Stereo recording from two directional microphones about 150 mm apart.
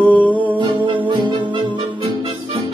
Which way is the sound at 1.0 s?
30° right (ahead or behind).